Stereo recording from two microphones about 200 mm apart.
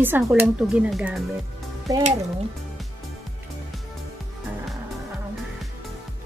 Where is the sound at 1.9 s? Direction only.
15° right (ahead or behind).